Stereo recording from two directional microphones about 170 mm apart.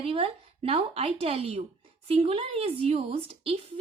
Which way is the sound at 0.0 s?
35° right (ahead or behind).